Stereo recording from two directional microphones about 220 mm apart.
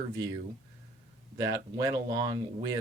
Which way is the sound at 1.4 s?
15° right (ahead or behind).